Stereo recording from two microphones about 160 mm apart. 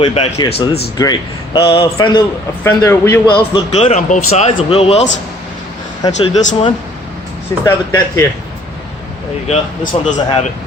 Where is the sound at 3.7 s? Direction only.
45° left (ahead or behind).